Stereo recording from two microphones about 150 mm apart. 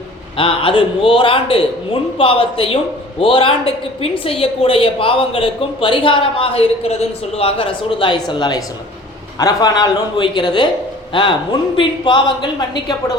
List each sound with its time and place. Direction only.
0.3 s a woman's voice: 35° left (ahead or behind)